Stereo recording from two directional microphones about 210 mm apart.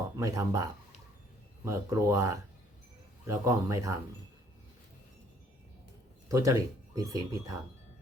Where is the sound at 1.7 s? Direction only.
15° right (ahead or behind).